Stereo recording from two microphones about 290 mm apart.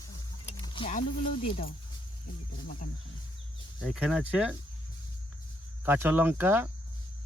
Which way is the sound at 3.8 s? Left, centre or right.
Centre.